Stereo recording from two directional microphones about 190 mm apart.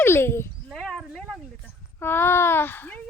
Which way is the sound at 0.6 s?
Centre (ahead or behind).